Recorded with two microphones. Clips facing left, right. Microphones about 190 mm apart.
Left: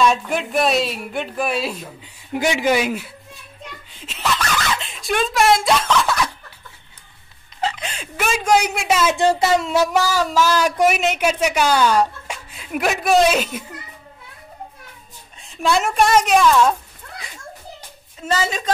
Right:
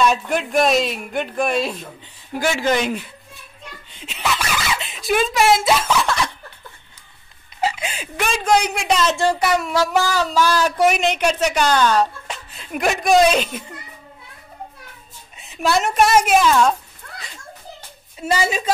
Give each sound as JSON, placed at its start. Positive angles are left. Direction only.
{"t": 0.0, "sound": "speech", "side_deg": 0}
{"t": 2.3, "sound": "a woman's voice", "side_deg": 15}
{"t": 7.6, "sound": "music", "side_deg": -10}
{"t": 8.2, "sound": "a woman's voice", "side_deg": 5}
{"t": 9.1, "sound": "speech", "side_deg": 20}
{"t": 10.0, "sound": "a woman's voice", "side_deg": 10}
{"t": 15.5, "sound": "speech", "side_deg": 0}
{"t": 18.2, "sound": "a woman's voice", "side_deg": -10}